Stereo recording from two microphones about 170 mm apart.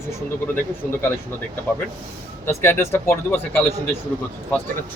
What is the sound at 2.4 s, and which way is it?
Speech, 15° left (ahead or behind).